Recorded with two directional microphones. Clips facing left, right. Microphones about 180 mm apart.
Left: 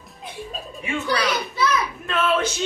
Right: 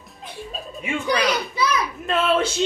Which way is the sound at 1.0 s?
10° right (ahead or behind).